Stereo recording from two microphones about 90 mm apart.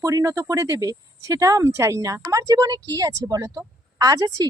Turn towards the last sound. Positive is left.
turn(degrees=-45)  # may be behind; listen again after turning